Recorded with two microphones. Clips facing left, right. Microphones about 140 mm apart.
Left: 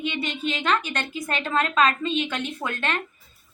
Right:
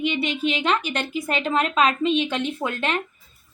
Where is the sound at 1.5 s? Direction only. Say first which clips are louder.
Even; 25° right (ahead or behind).